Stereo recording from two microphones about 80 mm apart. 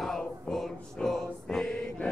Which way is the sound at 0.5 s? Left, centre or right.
Centre.